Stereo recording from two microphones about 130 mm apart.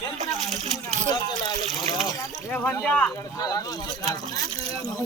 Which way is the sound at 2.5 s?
10° left (ahead or behind).